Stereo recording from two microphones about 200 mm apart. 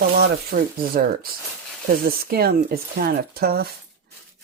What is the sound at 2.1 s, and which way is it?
Speech, 50° right (ahead or behind).